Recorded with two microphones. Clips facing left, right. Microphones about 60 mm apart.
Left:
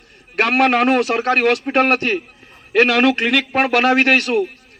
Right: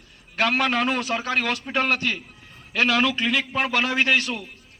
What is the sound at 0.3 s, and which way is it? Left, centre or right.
A man's voice, left.